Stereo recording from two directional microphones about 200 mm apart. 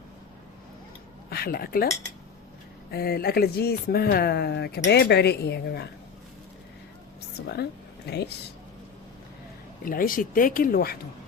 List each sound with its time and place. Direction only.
1.3 s speech: 50° left (ahead or behind)
2.9 s speech: 50° left (ahead or behind)
7.4 s speech: 55° left (ahead or behind)
9.8 s speech: 45° left (ahead or behind)